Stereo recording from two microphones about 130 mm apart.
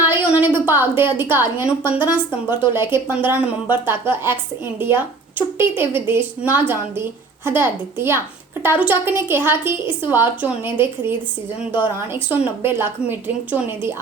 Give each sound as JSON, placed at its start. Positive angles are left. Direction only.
{"t": 0.0, "sound": "a woman's voice", "side_deg": -15}